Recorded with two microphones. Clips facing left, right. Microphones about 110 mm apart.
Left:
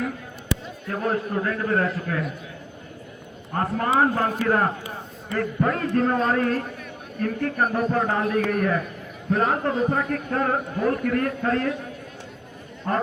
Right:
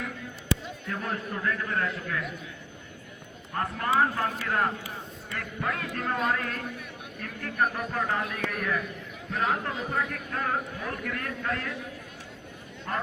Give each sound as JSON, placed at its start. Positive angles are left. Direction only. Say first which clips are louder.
{"t": 0.9, "sound": "a man's voice", "louder": "left 8 dB", "side_deg": 40}
{"t": 3.5, "sound": "a man's voice", "louder": "left 5 dB", "side_deg": 40}
{"t": 12.9, "sound": "a man's voice", "louder": "left 7 dB", "side_deg": 40}